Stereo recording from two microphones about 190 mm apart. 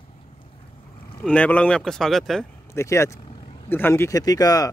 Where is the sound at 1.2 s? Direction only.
5° left (ahead or behind).